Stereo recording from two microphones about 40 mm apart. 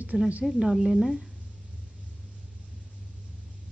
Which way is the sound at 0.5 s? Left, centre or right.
Centre.